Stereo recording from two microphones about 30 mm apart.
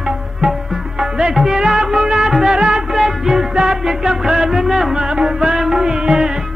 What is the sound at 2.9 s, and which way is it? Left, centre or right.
Music, centre.